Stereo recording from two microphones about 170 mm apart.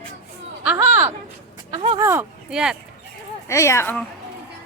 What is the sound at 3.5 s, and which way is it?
Speech, 15° left (ahead or behind).